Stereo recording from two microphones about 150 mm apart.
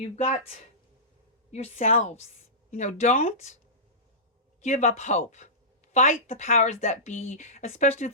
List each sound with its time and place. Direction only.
0.0 s speech: 45° left (ahead or behind)
1.5 s speech: 50° left (ahead or behind)
4.6 s speech: 50° left (ahead or behind)